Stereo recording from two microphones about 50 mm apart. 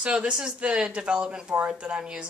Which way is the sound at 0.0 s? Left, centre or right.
Centre.